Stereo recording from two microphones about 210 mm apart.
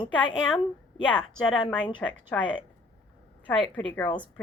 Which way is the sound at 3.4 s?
5° left (ahead or behind).